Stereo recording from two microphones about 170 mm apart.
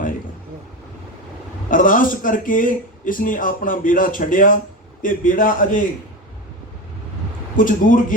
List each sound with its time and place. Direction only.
1.7 s a man's voice: 50° left (ahead or behind)
7.5 s a man's voice: 50° left (ahead or behind)